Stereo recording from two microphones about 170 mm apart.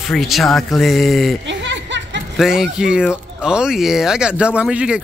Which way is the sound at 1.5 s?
90° right.